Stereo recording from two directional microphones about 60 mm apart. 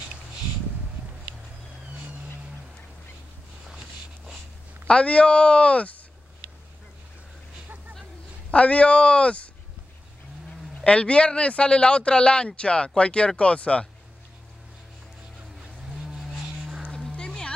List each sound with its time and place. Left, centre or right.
4.8 s speech: centre
8.5 s speech: left
10.8 s speech: centre
15.9 s vehicle: centre
16.9 s music: centre